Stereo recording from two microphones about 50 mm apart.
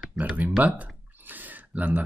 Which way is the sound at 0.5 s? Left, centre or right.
Right.